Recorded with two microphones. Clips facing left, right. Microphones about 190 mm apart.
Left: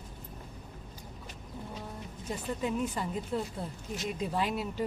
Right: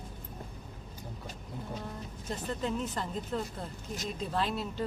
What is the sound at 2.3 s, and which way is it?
Speech, 10° left (ahead or behind).